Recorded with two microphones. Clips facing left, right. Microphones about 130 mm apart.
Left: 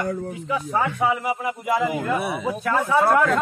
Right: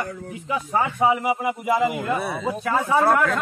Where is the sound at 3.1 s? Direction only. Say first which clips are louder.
Left 2 dB; 15° left (ahead or behind).